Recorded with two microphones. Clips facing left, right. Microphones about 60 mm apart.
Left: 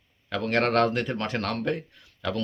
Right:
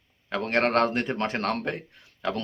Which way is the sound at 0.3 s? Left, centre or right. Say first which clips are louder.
Even; right.